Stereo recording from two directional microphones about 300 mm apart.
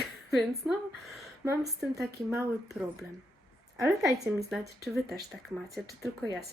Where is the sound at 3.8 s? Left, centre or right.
Centre.